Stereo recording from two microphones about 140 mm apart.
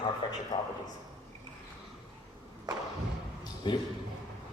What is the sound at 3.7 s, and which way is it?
Speech, 35° left (ahead or behind).